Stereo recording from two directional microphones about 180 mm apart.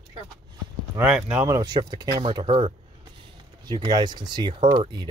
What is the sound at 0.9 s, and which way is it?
Speech, 10° right (ahead or behind).